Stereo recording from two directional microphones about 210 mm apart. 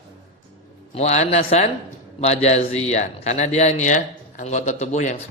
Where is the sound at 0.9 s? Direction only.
30° left (ahead or behind).